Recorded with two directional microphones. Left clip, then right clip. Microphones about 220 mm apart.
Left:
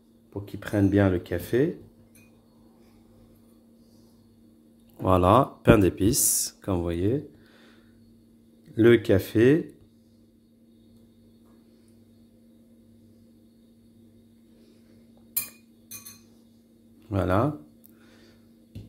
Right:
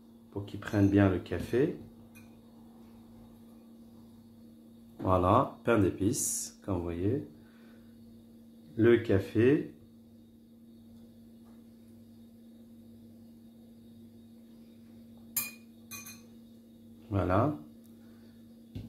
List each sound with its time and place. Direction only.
0.3 s speech: 40° left (ahead or behind)
5.0 s speech: 45° left (ahead or behind)
8.7 s speech: 50° left (ahead or behind)
17.1 s speech: 45° left (ahead or behind)